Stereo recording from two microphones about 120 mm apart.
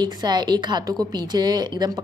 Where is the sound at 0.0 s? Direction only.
35° right (ahead or behind).